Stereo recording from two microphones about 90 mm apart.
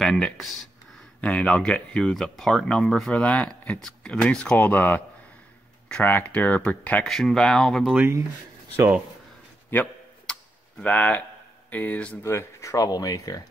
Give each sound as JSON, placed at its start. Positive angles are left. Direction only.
{"t": 0.0, "sound": "speech", "side_deg": 5}
{"t": 7.1, "sound": "speech", "side_deg": 5}
{"t": 9.7, "sound": "speech", "side_deg": 20}
{"t": 12.2, "sound": "speech", "side_deg": 30}